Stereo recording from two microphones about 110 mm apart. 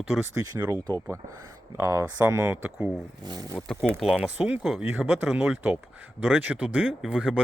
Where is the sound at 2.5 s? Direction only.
15° right (ahead or behind).